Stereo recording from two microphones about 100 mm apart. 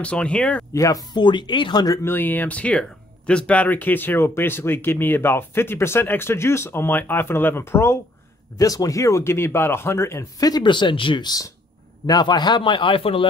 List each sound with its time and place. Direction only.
0.0 s speech: 10° left (ahead or behind)
0.7 s speech: 35° left (ahead or behind)
1.1 s speech: 50° left (ahead or behind)
2.0 s speech: 20° left (ahead or behind)
8.5 s speech: 35° left (ahead or behind); by 11.2 s 55° left (ahead or behind)
11.2 s speech: 35° left (ahead or behind); by 13.3 s 65° left (ahead or behind)